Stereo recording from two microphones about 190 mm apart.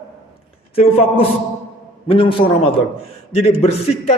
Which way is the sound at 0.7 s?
30° left (ahead or behind).